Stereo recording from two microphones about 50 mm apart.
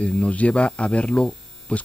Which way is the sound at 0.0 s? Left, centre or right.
Left.